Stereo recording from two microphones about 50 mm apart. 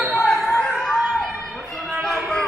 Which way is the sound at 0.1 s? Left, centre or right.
Centre.